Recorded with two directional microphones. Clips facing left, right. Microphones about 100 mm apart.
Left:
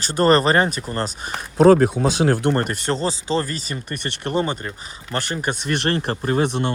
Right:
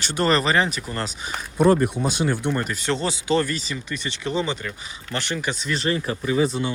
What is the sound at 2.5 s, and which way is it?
Speech, 50° left (ahead or behind).